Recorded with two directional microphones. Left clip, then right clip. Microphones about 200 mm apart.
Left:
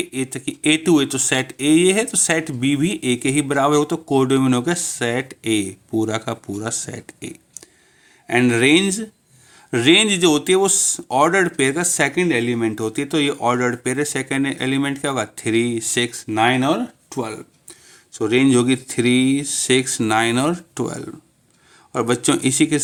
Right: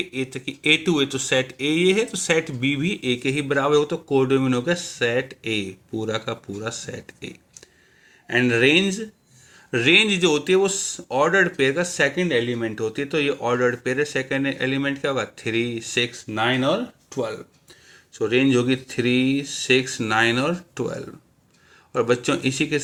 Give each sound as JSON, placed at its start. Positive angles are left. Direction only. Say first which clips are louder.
{"t": 0.1, "sound": "speech", "louder": "left 3 dB", "side_deg": 45}